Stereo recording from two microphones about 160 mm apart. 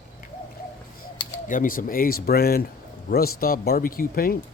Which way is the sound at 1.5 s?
60° left (ahead or behind).